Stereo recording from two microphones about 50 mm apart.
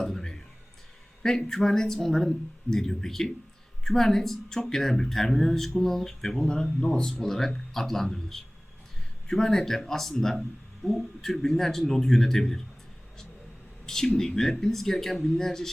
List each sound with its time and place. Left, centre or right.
0.0 s a sound: centre
1.2 s speech: centre
6.7 s speech: centre
13.8 s speech: centre